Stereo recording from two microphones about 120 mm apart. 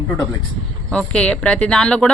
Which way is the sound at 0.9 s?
10° left (ahead or behind).